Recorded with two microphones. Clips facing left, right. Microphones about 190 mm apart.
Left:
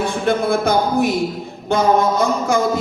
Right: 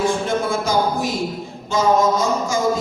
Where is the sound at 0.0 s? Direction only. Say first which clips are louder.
Left 2 dB; 60° left (ahead or behind).